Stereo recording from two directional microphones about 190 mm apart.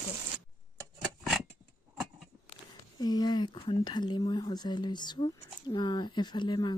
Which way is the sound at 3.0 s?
20° left (ahead or behind).